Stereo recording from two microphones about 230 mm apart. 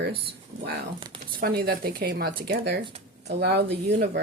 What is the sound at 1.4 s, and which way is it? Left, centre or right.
Speech, right.